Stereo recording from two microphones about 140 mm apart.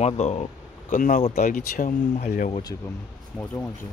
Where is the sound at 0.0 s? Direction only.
50° left (ahead or behind); by 2.5 s 65° left (ahead or behind).